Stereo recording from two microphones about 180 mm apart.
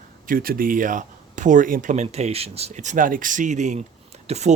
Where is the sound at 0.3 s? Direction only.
50° right (ahead or behind).